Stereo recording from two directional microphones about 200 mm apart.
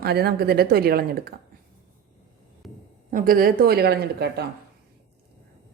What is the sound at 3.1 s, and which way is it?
A woman's voice, 45° right (ahead or behind).